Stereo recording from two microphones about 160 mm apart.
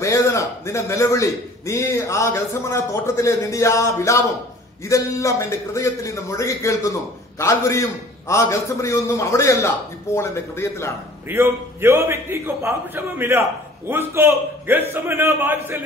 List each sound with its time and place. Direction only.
0.0 s a man's voice: 20° left (ahead or behind)
11.2 s a man's voice: 15° right (ahead or behind)